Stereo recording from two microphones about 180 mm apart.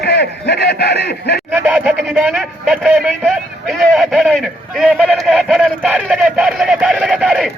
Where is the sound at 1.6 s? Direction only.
5° right (ahead or behind).